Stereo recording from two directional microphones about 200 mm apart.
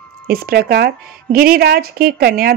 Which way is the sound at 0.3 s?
50° right (ahead or behind).